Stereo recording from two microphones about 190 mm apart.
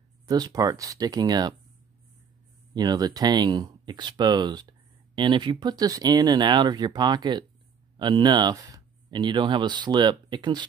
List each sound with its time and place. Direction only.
0.3 s speech: 20° right (ahead or behind)
2.7 s speech: 20° right (ahead or behind)